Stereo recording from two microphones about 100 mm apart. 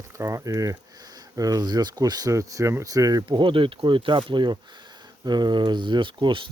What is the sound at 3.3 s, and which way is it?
Speech, 60° right (ahead or behind).